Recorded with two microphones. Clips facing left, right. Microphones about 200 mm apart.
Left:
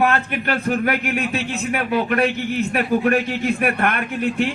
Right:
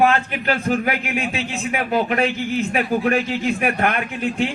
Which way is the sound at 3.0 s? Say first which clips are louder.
Left 1 dB; 55° left (ahead or behind).